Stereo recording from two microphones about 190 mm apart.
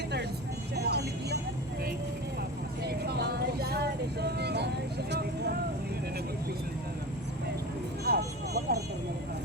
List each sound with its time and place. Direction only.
0.8 s vehicle: 60° right (ahead or behind)
2.8 s a sound: 60° right (ahead or behind)
8.0 s vehicle: 55° right (ahead or behind)